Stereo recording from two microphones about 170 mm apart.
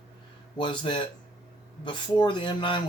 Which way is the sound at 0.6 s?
30° left (ahead or behind).